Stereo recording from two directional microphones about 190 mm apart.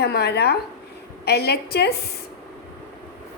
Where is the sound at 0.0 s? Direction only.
60° left (ahead or behind).